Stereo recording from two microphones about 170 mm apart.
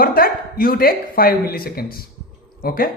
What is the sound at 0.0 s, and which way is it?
Speech, 60° left (ahead or behind).